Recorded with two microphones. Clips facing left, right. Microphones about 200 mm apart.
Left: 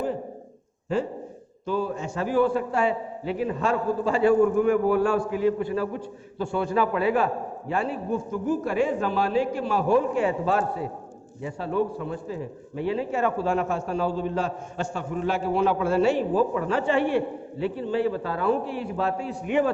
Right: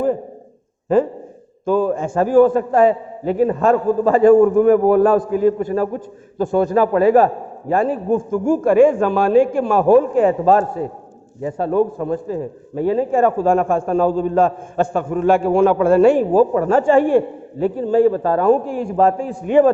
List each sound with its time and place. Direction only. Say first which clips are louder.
0.9 s a man's voice: right 10 dB; 50° right (ahead or behind)